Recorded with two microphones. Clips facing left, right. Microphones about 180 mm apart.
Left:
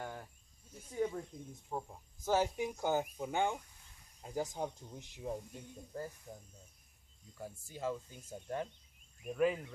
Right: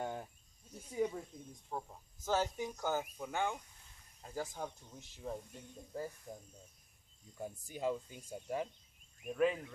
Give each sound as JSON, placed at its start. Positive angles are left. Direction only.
{"t": 0.0, "sound": "cricket", "side_deg": -20}
{"t": 0.9, "sound": "speech", "side_deg": 0}
{"t": 7.3, "sound": "speech", "side_deg": -20}
{"t": 9.2, "sound": "speech", "side_deg": 0}